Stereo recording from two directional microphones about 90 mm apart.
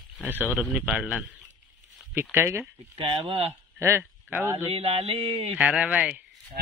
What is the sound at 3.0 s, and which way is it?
Speech, 90° right.